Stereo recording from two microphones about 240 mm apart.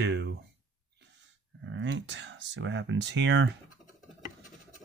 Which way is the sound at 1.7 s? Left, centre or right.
Right.